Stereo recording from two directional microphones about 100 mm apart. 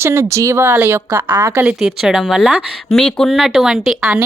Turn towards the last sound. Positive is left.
turn(degrees=-5)  # may be behind; listen again after turning